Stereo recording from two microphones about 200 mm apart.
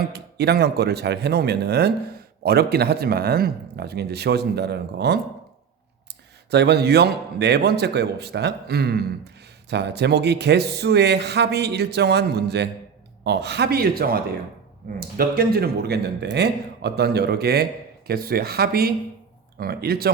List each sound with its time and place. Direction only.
0.1 s speech: 55° right (ahead or behind)
6.5 s speech: 55° right (ahead or behind)